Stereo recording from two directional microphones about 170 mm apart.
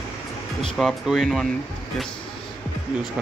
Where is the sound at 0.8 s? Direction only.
Centre (ahead or behind).